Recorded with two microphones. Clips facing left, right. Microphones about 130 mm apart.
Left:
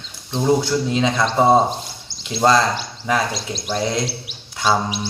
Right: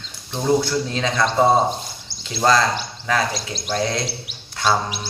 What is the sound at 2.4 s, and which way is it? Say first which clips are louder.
Speech: left 2 dB; 25° left (ahead or behind).